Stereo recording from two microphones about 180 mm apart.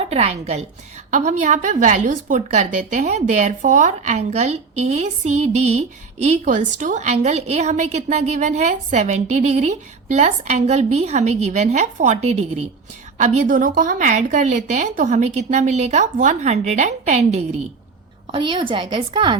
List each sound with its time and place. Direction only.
0.0 s a woman's voice: 35° right (ahead or behind)
18.3 s a woman's voice: 30° right (ahead or behind)